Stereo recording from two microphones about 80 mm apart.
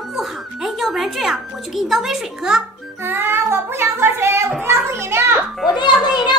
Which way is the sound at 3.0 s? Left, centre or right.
Right.